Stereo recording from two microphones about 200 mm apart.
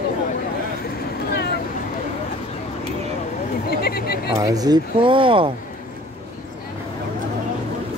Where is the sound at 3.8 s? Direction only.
50° left (ahead or behind).